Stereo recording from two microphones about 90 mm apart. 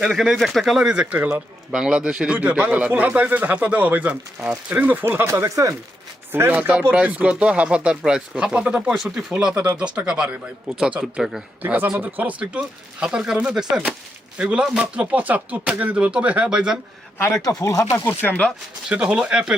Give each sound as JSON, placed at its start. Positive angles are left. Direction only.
{"t": 0.0, "sound": "speech", "side_deg": 0}
{"t": 5.3, "sound": "speech", "side_deg": -40}
{"t": 6.5, "sound": "speech", "side_deg": -15}
{"t": 17.2, "sound": "a man's voice", "side_deg": 30}
{"t": 17.9, "sound": "speech", "side_deg": 20}
{"t": 18.9, "sound": "speech", "side_deg": -10}